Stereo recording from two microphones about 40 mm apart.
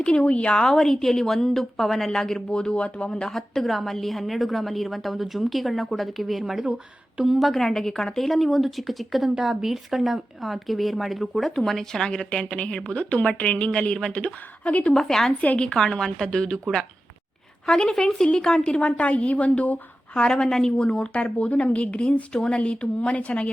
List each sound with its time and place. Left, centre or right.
0.0 s speech: left
0.7 s a woman's voice: centre
3.2 s a woman's voice: centre
7.6 s a woman's voice: centre
8.3 s a woman's voice: centre
9.3 s a woman's voice: centre; by 14.9 s left
14.9 s a woman's voice: centre
15.4 s speech: left
15.7 s a woman's voice: centre
17.7 s a woman's voice: centre; by 19.8 s left
20.1 s a woman's voice: centre